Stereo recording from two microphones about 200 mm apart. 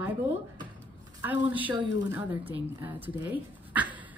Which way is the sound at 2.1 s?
10° right (ahead or behind).